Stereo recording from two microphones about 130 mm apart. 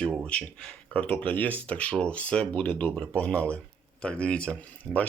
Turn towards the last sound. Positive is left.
turn(degrees=-25)  # may be behind; listen again after turning